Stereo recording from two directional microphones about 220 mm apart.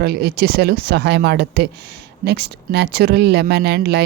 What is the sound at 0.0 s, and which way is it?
Speech, 45° right (ahead or behind).